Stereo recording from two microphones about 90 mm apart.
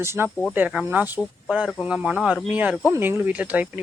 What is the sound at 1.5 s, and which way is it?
Speech, 10° right (ahead or behind).